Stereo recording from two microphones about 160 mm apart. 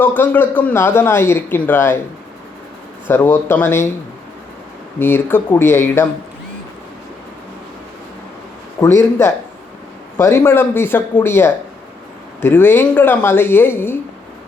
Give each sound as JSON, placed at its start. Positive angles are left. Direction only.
{"t": 0.0, "sound": "a man's voice", "side_deg": 10}
{"t": 3.1, "sound": "a man's voice", "side_deg": 15}
{"t": 4.9, "sound": "a man's voice", "side_deg": 15}
{"t": 8.8, "sound": "a man's voice", "side_deg": 15}